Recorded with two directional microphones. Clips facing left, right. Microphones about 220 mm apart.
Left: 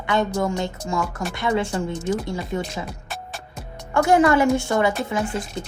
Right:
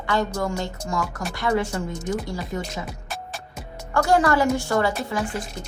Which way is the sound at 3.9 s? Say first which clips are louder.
Left 3 dB; 20° left (ahead or behind).